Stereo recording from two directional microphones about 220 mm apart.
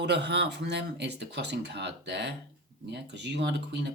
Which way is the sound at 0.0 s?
50° right (ahead or behind).